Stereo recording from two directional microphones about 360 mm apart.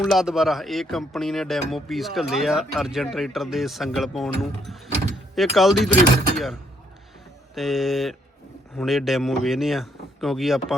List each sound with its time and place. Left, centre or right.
0.0 s speech: centre